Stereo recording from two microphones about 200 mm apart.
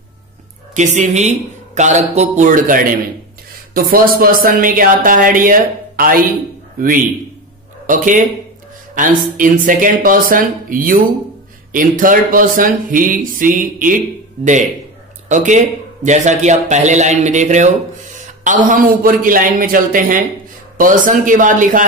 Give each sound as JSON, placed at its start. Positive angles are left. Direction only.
{"t": 0.7, "sound": "a man's voice", "side_deg": -35}
{"t": 7.8, "sound": "a man's voice", "side_deg": -40}